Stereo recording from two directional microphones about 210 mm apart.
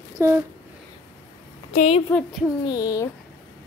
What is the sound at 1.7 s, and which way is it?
Speech, 35° left (ahead or behind).